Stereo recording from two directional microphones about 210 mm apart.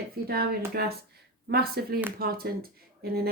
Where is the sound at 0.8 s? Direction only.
50° right (ahead or behind).